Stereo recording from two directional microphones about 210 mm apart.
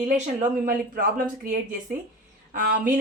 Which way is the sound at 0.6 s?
45° right (ahead or behind).